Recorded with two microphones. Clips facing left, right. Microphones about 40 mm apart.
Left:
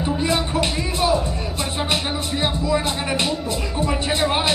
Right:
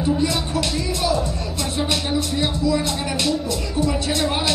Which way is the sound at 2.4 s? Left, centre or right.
Left.